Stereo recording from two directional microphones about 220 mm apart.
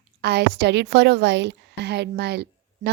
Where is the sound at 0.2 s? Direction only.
50° right (ahead or behind).